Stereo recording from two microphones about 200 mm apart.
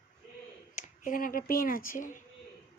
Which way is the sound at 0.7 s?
40° left (ahead or behind).